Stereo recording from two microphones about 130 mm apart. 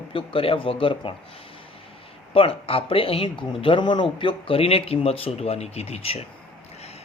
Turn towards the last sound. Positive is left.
turn(degrees=50)  # may be behind; listen again after turning